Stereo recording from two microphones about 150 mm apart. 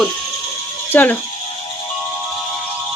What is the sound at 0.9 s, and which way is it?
Speech, 10° left (ahead or behind).